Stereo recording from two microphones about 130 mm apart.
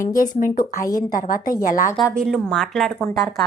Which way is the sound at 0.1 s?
90° left.